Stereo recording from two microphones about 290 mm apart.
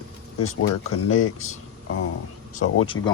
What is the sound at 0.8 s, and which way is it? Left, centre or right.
Speech, left.